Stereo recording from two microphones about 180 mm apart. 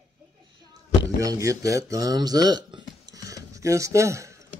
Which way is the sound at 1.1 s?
20° right (ahead or behind).